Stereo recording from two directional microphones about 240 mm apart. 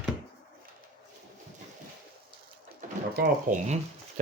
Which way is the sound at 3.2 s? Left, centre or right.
Right.